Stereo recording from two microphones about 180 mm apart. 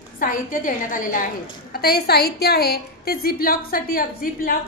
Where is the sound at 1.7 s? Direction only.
60° left (ahead or behind).